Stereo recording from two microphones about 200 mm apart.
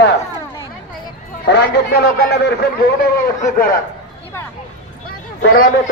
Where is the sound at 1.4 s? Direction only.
55° left (ahead or behind).